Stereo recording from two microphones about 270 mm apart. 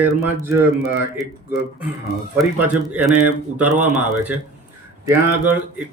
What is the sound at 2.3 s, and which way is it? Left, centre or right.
Speech, centre.